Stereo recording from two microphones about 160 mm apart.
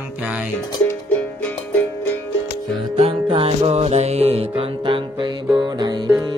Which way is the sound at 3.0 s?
35° right (ahead or behind).